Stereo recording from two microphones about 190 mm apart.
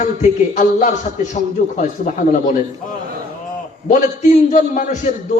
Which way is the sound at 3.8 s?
40° left (ahead or behind).